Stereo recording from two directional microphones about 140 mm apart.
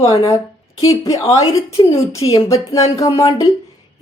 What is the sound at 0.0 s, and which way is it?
A woman's voice, 20° left (ahead or behind).